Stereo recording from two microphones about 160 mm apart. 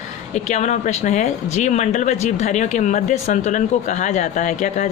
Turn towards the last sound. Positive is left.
turn(degrees=50)  # may be behind; listen again after turning